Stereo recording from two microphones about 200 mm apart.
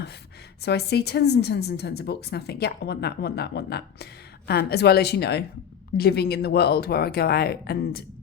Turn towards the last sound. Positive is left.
turn(degrees=50)  # may be behind; listen again after turning